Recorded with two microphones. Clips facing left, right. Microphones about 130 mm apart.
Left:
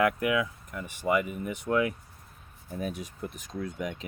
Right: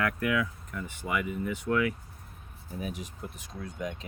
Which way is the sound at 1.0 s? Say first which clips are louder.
Left 6 dB; 40° left (ahead or behind).